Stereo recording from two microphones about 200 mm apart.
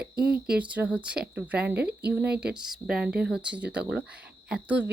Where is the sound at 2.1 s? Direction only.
5° right (ahead or behind).